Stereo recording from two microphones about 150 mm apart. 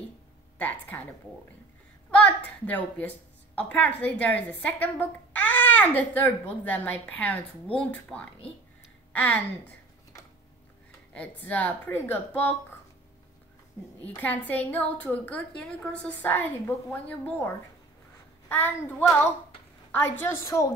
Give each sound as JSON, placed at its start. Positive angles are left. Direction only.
{"t": 0.6, "sound": "a woman's voice", "side_deg": 10}
{"t": 2.0, "sound": "a woman's voice", "side_deg": 10}
{"t": 11.1, "sound": "a woman's voice", "side_deg": 10}
{"t": 14.0, "sound": "a woman's voice", "side_deg": 10}
{"t": 18.5, "sound": "a woman's voice", "side_deg": 10}